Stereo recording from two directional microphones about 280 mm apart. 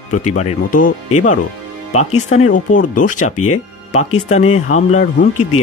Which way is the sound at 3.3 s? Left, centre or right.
Left.